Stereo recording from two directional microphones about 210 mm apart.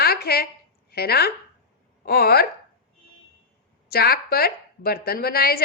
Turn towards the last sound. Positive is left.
turn(degrees=45)  # may be behind; listen again after turning